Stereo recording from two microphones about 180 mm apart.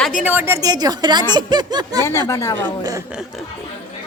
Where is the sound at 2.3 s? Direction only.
15° left (ahead or behind).